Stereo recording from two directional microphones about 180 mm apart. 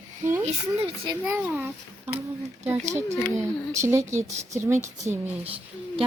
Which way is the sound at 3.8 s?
15° right (ahead or behind).